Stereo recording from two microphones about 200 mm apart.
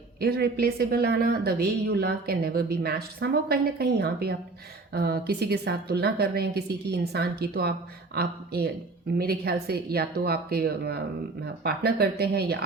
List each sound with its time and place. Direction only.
0.2 s speech: 55° right (ahead or behind)